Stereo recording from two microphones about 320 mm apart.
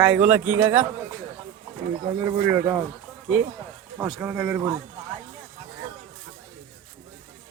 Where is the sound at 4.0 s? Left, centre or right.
Centre.